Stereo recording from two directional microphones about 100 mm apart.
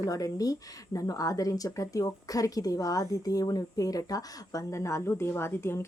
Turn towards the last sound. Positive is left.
turn(degrees=25)  # may be behind; listen again after turning